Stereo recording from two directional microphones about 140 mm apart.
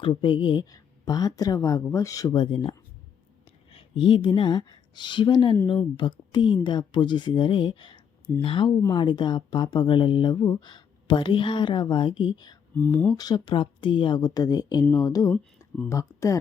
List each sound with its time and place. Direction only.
0.0 s speech: 35° left (ahead or behind); by 16.4 s 20° left (ahead or behind)